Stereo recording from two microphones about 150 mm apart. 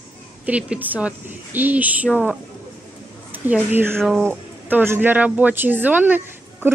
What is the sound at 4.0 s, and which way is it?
Speech, 5° left (ahead or behind).